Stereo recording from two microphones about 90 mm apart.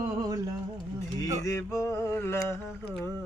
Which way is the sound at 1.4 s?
35° left (ahead or behind).